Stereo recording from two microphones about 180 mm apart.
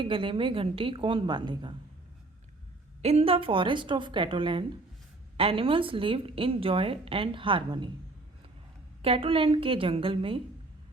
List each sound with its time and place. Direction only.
0.0 s a woman's voice: 30° right (ahead or behind)
3.0 s a woman's voice: 35° right (ahead or behind)
9.0 s a woman's voice: 30° right (ahead or behind)